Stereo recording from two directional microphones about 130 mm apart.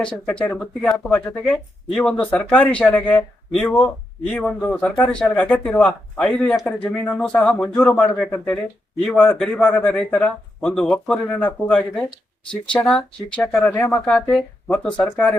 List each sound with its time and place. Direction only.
0.0 s a man's voice: 5° left (ahead or behind)
13.7 s speech: 15° left (ahead or behind)